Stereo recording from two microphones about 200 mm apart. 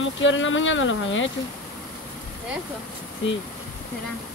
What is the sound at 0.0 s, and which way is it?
Speech, 70° left (ahead or behind).